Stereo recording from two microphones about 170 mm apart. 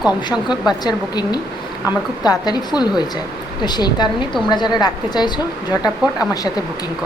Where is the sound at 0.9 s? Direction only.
25° left (ahead or behind).